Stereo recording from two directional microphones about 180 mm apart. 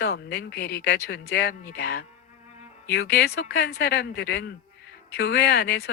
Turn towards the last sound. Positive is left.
turn(degrees=60)  # may be behind; listen again after turning